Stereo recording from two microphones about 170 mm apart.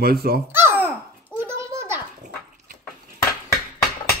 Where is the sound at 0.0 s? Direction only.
65° right (ahead or behind).